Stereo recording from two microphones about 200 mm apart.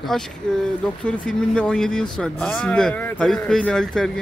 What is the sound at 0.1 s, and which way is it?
Speech, 5° left (ahead or behind).